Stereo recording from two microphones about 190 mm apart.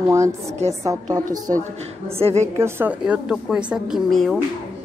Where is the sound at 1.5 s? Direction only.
30° right (ahead or behind).